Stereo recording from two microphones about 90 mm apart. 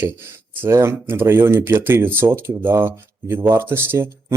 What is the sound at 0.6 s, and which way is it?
Speech, 25° right (ahead or behind).